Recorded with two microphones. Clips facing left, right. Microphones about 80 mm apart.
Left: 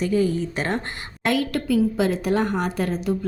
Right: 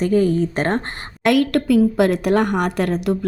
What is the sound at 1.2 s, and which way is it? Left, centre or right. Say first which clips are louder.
A woman's voice: right 6 dB; right.